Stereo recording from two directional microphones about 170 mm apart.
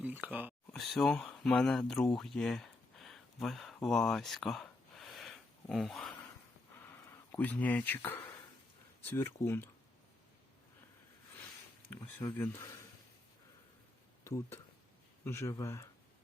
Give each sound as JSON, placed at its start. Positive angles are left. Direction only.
{"t": 0.0, "sound": "speech", "side_deg": -10}
{"t": 0.7, "sound": "speech", "side_deg": 0}
{"t": 7.3, "sound": "speech", "side_deg": 10}
{"t": 11.9, "sound": "speech", "side_deg": 10}
{"t": 14.3, "sound": "speech", "side_deg": 15}